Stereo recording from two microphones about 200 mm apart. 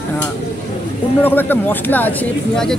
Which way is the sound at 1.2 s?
10° left (ahead or behind).